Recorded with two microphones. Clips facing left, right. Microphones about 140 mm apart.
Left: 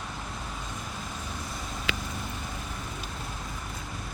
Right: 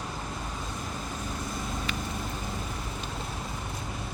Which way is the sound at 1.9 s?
90° left.